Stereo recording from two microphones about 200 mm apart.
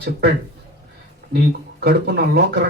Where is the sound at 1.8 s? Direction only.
55° right (ahead or behind).